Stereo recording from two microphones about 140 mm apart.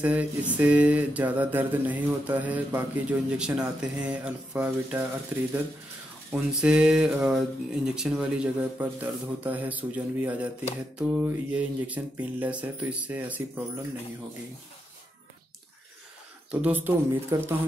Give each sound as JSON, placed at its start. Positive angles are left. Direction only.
{"t": 0.0, "sound": "speech", "side_deg": -10}
{"t": 16.6, "sound": "speech", "side_deg": -10}
{"t": 17.3, "sound": "speech", "side_deg": -25}